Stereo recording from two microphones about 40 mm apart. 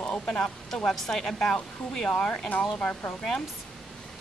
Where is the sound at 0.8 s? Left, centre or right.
Centre.